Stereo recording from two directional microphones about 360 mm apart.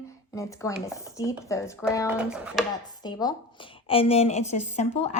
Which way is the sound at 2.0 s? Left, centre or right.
Centre.